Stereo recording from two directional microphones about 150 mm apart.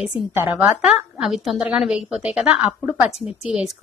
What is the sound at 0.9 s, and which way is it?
A woman's voice, centre (ahead or behind).